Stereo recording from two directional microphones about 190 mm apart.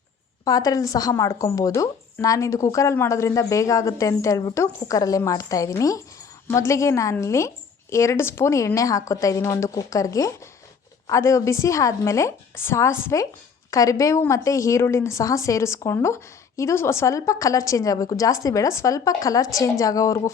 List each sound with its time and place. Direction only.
0.4 s a woman's voice: 20° left (ahead or behind)